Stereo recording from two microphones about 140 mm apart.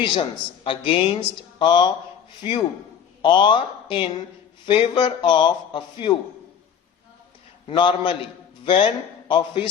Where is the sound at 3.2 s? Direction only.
35° left (ahead or behind).